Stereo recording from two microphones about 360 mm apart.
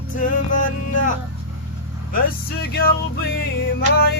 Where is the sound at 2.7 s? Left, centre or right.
Left.